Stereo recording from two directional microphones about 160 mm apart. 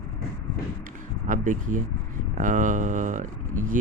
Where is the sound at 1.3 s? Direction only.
55° right (ahead or behind).